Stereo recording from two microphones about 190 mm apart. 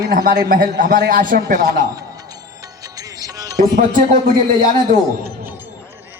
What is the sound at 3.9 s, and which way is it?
A woman's voice, 45° right (ahead or behind).